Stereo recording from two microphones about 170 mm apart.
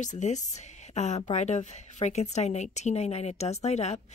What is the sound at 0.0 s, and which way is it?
A woman's voice, 45° left (ahead or behind).